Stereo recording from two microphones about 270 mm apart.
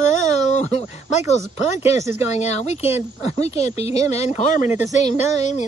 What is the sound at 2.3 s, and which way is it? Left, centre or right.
A woman's voice, left.